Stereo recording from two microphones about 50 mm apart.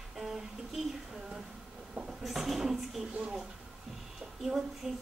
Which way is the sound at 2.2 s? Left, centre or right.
Centre.